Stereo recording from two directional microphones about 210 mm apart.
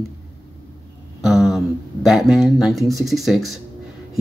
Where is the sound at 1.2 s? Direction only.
Centre (ahead or behind).